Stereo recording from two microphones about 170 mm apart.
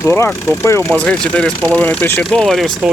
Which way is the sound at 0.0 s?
15° left (ahead or behind).